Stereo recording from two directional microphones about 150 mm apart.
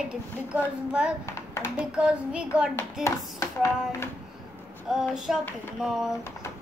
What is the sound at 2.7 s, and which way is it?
Speech, 20° left (ahead or behind).